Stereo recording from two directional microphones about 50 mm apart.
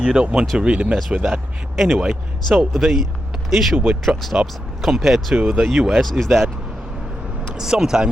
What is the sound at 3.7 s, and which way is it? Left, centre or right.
Speech, right.